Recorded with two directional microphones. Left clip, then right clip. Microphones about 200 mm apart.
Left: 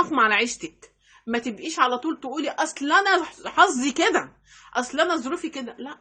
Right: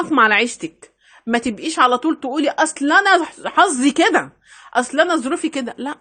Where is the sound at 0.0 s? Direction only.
35° right (ahead or behind).